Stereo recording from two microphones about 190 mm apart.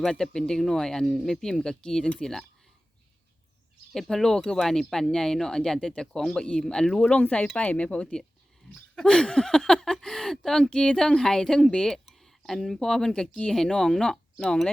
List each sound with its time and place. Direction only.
0.0 s speech: 5° left (ahead or behind)
3.9 s speech: centre (ahead or behind)